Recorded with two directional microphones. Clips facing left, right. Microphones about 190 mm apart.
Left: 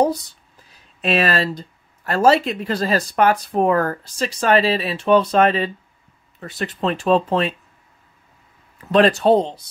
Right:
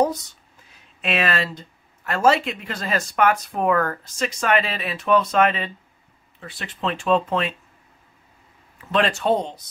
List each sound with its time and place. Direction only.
1.0 s speech: 35° left (ahead or behind)
8.9 s speech: 35° left (ahead or behind)